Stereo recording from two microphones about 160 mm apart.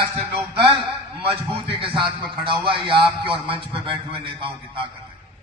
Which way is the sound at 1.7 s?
35° right (ahead or behind).